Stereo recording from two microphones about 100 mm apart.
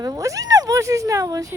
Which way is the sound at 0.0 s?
35° right (ahead or behind).